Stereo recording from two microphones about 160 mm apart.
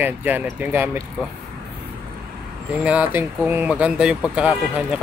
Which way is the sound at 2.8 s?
10° right (ahead or behind).